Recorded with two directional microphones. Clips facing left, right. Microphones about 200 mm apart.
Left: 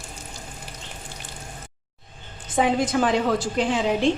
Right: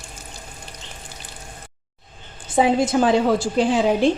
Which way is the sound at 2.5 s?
30° right (ahead or behind).